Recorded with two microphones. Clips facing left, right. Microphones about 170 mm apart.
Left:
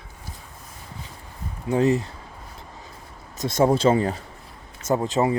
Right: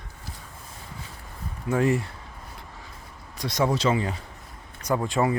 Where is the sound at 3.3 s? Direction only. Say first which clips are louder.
Left 5 dB; 45° left (ahead or behind).